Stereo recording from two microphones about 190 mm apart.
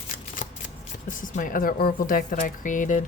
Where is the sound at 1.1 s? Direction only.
45° left (ahead or behind).